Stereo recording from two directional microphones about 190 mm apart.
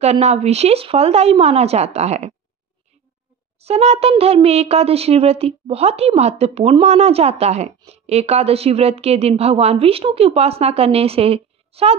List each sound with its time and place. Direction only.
0.0 s speech: 35° right (ahead or behind)
3.5 s speech: 35° right (ahead or behind)